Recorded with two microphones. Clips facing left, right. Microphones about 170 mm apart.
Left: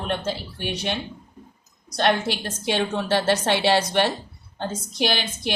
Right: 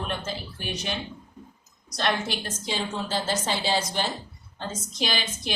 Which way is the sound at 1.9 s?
60° left (ahead or behind).